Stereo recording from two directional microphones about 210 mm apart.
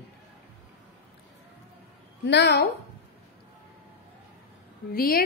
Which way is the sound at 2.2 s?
55° left (ahead or behind).